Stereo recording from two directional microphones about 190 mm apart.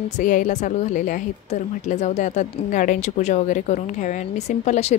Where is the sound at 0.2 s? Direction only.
40° left (ahead or behind).